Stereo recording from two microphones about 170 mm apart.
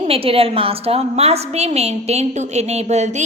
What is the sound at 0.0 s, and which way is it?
A woman's voice, 35° right (ahead or behind).